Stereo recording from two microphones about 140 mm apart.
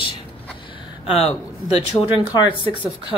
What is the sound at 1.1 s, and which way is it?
Speech, 45° left (ahead or behind).